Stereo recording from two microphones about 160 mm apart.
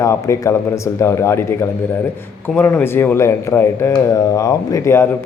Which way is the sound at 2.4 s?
15° left (ahead or behind).